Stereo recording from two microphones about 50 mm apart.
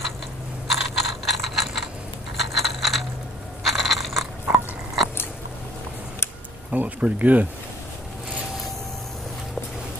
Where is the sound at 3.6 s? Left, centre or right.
Centre.